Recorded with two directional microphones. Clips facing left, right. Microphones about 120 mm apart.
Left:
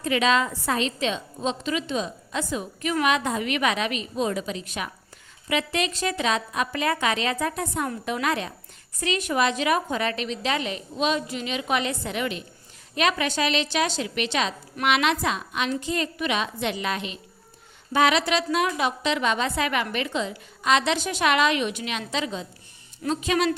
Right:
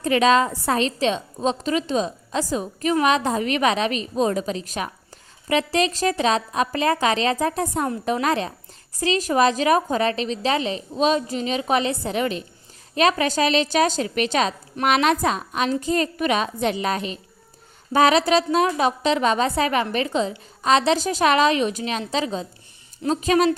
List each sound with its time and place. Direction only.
0.0 s a woman's voice: 40° right (ahead or behind)